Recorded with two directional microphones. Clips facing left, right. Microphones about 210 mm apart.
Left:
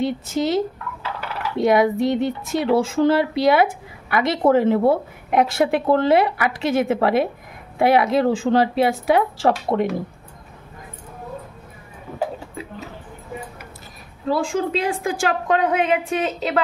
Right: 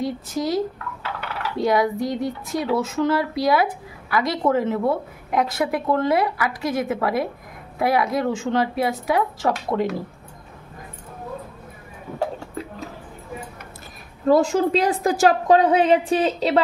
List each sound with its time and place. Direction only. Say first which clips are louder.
0.0 s a woman's voice: left 3 dB; 25° left (ahead or behind)
1.6 s a woman's voice: left 4 dB; 25° left (ahead or behind)
14.2 s a woman's voice: right 4 dB; 40° right (ahead or behind)